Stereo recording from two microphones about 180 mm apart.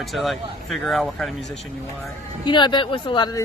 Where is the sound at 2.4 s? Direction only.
25° left (ahead or behind).